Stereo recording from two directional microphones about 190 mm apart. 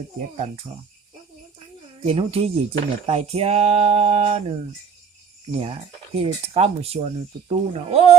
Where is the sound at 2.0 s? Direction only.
30° right (ahead or behind).